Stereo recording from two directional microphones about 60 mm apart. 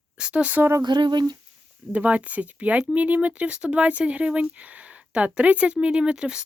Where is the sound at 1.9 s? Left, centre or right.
Right.